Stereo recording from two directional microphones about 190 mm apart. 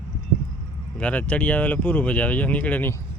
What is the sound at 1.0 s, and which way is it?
Speech, 5° left (ahead or behind).